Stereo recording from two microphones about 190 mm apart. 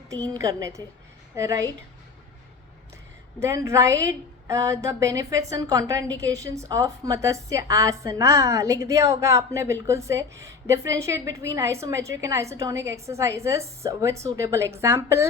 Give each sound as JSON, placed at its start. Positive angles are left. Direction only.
{"t": 0.1, "sound": "a woman's voice", "side_deg": -15}
{"t": 3.4, "sound": "a woman's voice", "side_deg": -15}